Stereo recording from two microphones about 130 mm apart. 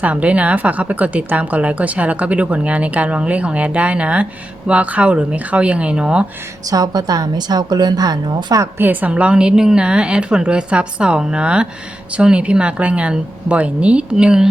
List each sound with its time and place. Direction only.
0.0 s speech: 10° right (ahead or behind)
6.7 s a woman's voice: 30° right (ahead or behind)
8.8 s speech: 15° right (ahead or behind)